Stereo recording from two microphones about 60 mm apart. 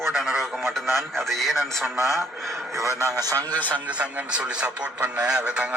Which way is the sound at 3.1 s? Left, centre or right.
Right.